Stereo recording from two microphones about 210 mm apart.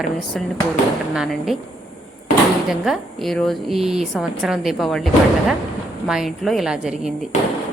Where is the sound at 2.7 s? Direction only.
Centre (ahead or behind).